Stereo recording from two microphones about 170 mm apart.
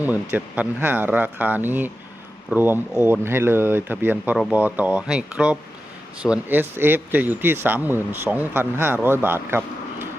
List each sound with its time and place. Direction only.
0.0 s speech: 10° right (ahead or behind)